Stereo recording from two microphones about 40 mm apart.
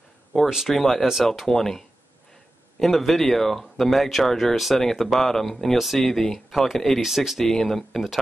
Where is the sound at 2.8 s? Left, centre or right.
Centre.